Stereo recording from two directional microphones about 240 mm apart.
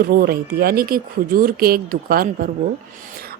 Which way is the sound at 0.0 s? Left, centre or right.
Right.